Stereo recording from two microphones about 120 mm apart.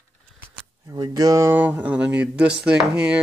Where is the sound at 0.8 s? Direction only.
35° right (ahead or behind).